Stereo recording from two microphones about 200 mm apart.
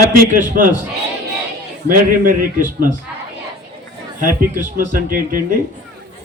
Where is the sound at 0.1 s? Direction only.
45° right (ahead or behind).